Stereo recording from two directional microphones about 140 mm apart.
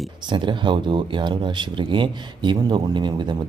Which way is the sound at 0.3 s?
35° right (ahead or behind).